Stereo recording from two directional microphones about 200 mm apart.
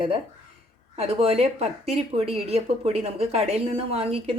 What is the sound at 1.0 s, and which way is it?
Speech, 30° right (ahead or behind).